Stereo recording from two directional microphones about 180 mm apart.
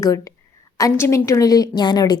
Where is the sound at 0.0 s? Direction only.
20° left (ahead or behind).